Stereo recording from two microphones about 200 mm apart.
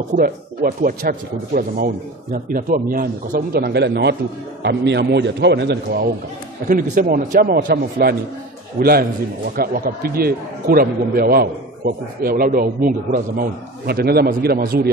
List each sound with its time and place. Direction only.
0.1 s a man's voice: 40° right (ahead or behind)
6.7 s a man's voice: 45° right (ahead or behind)